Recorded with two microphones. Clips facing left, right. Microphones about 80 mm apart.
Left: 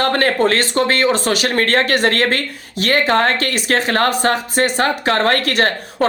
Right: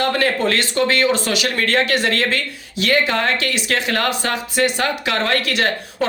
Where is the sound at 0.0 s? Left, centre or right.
Left.